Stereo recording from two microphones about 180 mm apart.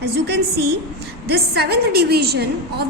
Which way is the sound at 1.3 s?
60° right (ahead or behind).